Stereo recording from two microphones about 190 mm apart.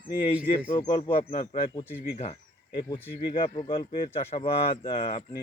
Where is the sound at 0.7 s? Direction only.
25° left (ahead or behind).